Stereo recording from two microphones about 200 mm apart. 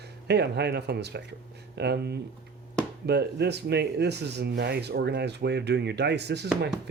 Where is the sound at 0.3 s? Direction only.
55° right (ahead or behind).